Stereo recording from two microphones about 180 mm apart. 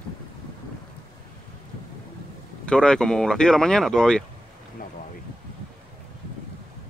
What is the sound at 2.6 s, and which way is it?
Speech, 5° left (ahead or behind).